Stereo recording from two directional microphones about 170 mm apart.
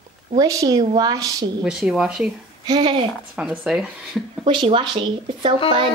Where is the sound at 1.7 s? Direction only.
5° right (ahead or behind).